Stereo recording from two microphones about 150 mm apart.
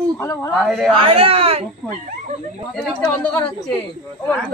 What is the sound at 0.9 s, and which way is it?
Speech, 40° right (ahead or behind).